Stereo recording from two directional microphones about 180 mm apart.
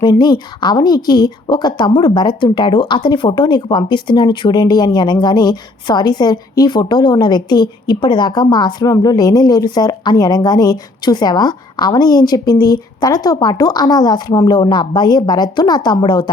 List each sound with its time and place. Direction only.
0.0 s speech: 25° left (ahead or behind)